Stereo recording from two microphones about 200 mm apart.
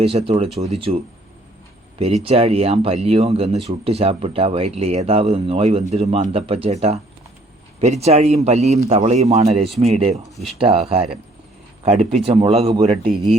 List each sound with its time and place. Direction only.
0.0 s speech: 30° right (ahead or behind)
2.2 s speech: 30° right (ahead or behind)